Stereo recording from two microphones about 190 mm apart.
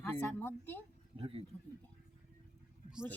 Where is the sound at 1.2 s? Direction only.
30° right (ahead or behind).